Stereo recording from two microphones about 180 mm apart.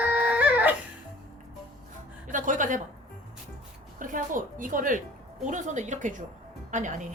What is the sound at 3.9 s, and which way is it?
A woman's voice, 45° right (ahead or behind).